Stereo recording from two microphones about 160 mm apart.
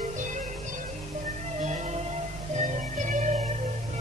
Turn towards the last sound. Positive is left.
turn(degrees=-50)  # may be behind; listen again after turning